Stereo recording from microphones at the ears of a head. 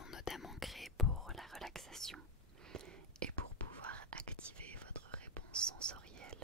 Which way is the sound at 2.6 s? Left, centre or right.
Right.